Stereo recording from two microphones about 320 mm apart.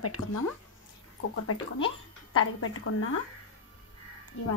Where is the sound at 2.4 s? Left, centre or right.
Left.